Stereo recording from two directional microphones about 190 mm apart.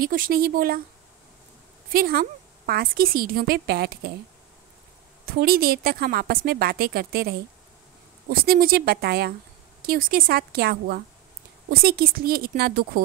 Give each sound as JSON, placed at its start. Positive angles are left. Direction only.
{"t": 0.0, "sound": "a woman's voice", "side_deg": -45}
{"t": 1.9, "sound": "a woman's voice", "side_deg": -50}
{"t": 5.4, "sound": "a woman's voice", "side_deg": -50}